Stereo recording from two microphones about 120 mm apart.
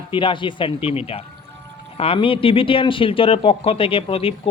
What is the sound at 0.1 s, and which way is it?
A man's voice, 45° left (ahead or behind).